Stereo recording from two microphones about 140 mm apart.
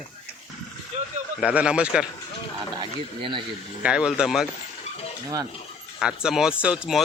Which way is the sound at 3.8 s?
5° right (ahead or behind).